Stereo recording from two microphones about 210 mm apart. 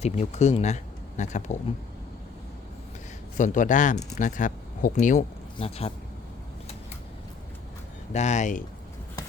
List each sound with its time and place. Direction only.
0.0 s speech: 35° left (ahead or behind)
3.3 s speech: 40° left (ahead or behind)
8.1 s speech: 35° left (ahead or behind)